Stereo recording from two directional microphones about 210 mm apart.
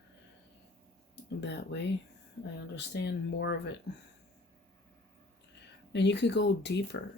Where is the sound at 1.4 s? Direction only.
55° left (ahead or behind).